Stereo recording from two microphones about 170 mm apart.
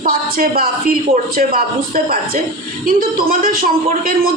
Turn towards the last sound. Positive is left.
turn(degrees=-55)  # may be behind; listen again after turning